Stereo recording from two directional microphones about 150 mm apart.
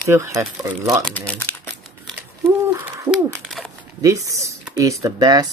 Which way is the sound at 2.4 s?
20° right (ahead or behind).